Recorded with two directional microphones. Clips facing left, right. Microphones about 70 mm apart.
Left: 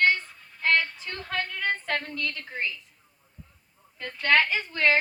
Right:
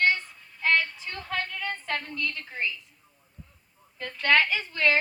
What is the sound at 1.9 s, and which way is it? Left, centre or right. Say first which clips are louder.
Speech: left 1 dB; left.